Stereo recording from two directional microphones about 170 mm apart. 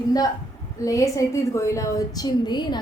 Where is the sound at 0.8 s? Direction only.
20° left (ahead or behind).